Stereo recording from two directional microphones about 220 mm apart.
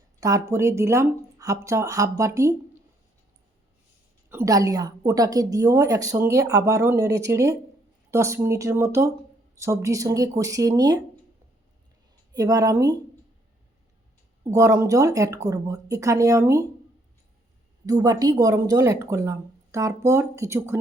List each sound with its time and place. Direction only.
0.2 s a woman's voice: 15° right (ahead or behind)
4.3 s a woman's voice: 15° right (ahead or behind)
12.3 s a woman's voice: 15° right (ahead or behind)
14.5 s a woman's voice: 15° right (ahead or behind)
17.8 s a woman's voice: 15° right (ahead or behind)